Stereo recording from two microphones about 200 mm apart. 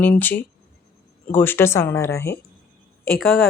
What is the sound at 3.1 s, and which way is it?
Speech, centre (ahead or behind).